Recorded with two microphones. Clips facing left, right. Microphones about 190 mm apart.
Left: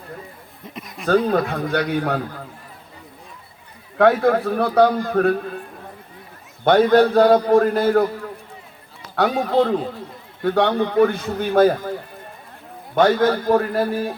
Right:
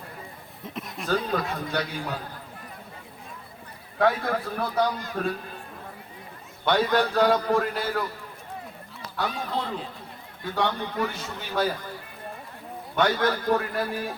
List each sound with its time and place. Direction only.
0.6 s a sound: centre (ahead or behind)
1.0 s a man's voice: 55° left (ahead or behind)
3.9 s a man's voice: 65° left (ahead or behind)
6.7 s a man's voice: 45° left (ahead or behind)
9.1 s a man's voice: 75° left (ahead or behind); by 11.8 s 55° left (ahead or behind)
13.3 s a man's voice: 40° left (ahead or behind)